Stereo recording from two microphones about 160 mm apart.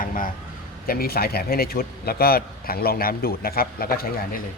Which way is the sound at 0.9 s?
70° left (ahead or behind).